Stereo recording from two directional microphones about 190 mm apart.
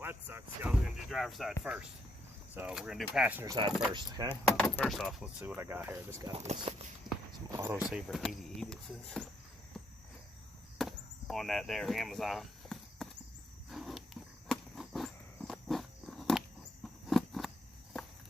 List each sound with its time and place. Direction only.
0.0 s speech: 10° right (ahead or behind)
2.6 s speech: 5° right (ahead or behind)
3.4 s speech: 20° right (ahead or behind)
4.8 s speech: centre (ahead or behind); by 6.3 s 15° right (ahead or behind)
6.3 s speech: 35° right (ahead or behind)
7.5 s speech: 10° right (ahead or behind)
10.8 s chop: centre (ahead or behind)
13.7 s walk: centre (ahead or behind)
17.1 s a sound: centre (ahead or behind)